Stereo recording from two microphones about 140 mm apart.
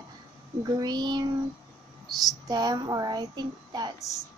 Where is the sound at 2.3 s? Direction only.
30° right (ahead or behind).